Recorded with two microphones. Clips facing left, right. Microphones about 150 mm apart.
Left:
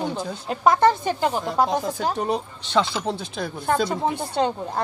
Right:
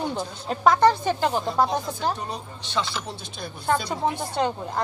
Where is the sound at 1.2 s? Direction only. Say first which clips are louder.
Left 1 dB; 5° left (ahead or behind).